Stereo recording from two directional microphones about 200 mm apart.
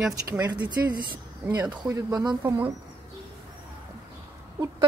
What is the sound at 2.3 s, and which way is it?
Speech, 5° right (ahead or behind).